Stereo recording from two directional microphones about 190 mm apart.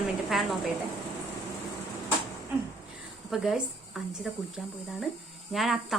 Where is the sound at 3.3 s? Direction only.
Centre (ahead or behind).